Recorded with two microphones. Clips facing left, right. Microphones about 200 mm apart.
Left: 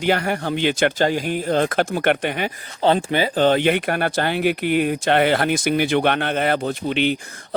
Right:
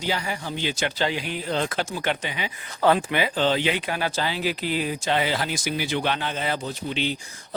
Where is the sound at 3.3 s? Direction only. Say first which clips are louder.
Left 8 dB; 55° left (ahead or behind).